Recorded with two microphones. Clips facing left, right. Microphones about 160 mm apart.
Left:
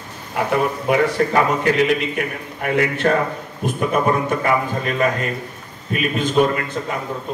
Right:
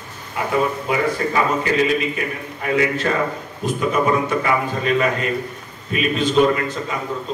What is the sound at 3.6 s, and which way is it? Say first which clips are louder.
Speech: even; 10° left (ahead or behind).